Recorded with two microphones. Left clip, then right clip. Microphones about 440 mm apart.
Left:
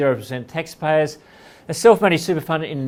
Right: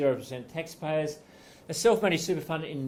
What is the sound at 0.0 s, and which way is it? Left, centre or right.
Speech, left.